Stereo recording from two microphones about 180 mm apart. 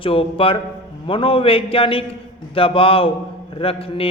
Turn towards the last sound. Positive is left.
turn(degrees=30)  # may be behind; listen again after turning